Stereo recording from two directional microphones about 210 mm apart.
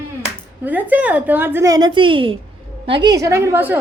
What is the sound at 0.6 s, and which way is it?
A woman's voice, 10° right (ahead or behind).